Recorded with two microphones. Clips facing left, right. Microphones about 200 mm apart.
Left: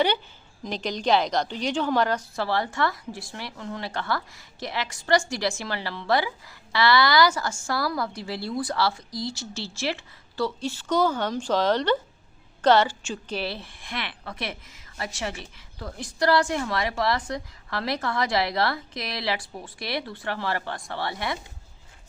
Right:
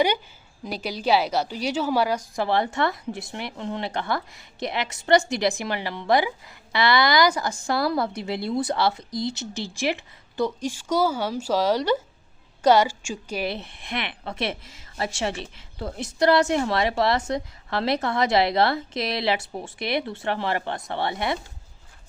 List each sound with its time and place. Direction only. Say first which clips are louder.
0.6 s a woman's voice: even; 10° right (ahead or behind)